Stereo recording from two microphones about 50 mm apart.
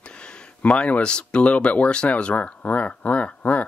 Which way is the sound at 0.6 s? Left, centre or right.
Left.